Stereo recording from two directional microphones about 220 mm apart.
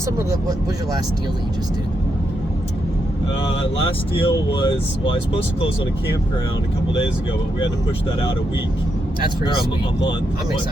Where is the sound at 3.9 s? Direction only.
25° left (ahead or behind).